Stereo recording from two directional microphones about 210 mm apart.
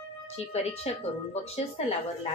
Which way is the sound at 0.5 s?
30° left (ahead or behind).